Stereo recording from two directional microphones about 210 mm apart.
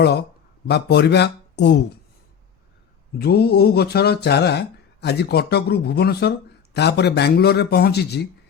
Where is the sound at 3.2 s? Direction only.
50° left (ahead or behind).